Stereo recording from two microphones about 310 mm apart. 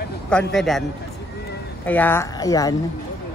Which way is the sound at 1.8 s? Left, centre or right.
Centre.